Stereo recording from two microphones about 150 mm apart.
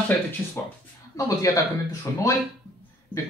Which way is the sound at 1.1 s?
25° left (ahead or behind).